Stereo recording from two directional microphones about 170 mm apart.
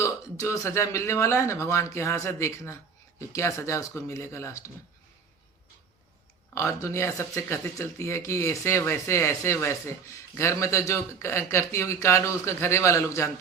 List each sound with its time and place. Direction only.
0.0 s speech: 20° left (ahead or behind)
6.5 s speech: 15° left (ahead or behind)